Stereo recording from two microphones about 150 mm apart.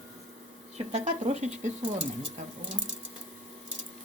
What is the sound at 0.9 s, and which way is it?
Speech, 50° right (ahead or behind).